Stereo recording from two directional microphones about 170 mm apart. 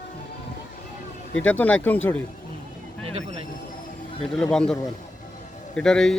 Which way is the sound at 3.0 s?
35° right (ahead or behind).